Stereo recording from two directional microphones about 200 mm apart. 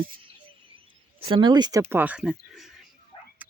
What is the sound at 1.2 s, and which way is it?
Speech, 25° right (ahead or behind).